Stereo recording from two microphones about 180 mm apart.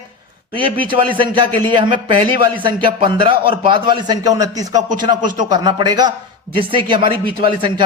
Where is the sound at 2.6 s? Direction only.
25° right (ahead or behind).